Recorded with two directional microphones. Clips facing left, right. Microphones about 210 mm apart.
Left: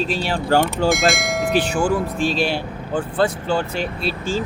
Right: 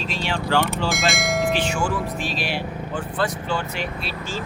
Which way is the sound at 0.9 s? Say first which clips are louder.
Left 4 dB; centre (ahead or behind).